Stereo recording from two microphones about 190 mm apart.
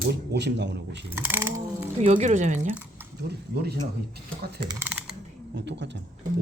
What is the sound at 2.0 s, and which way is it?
Speech, 35° right (ahead or behind).